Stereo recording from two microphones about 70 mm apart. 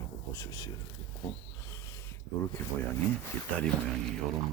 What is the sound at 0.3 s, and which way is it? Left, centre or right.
Speech, left.